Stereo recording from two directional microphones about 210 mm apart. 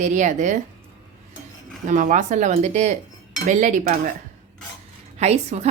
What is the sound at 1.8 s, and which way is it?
A woman's voice, 40° right (ahead or behind).